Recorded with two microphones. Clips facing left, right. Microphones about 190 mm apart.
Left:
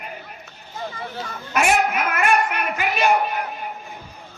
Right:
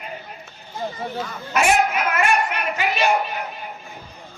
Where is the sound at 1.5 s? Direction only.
55° left (ahead or behind).